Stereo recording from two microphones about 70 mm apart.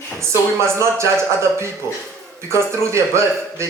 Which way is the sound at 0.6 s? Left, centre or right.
Right.